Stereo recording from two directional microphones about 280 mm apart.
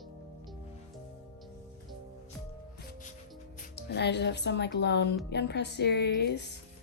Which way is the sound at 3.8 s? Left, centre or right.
Left.